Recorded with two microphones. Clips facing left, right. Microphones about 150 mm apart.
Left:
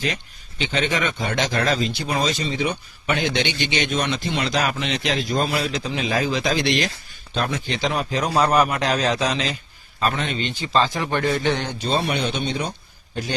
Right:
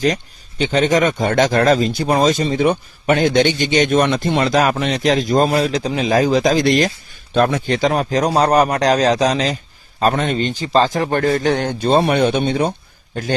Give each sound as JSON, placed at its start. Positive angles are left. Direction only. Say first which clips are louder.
{"t": 0.6, "sound": "a man's voice", "louder": "right 8 dB", "side_deg": -40}